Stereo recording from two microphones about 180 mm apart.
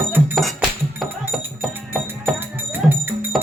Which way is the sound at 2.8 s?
Centre (ahead or behind).